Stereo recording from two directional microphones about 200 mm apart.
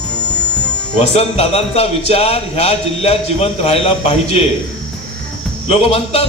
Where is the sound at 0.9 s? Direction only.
30° left (ahead or behind).